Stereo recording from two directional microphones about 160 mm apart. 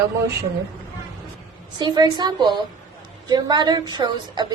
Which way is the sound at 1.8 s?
25° right (ahead or behind).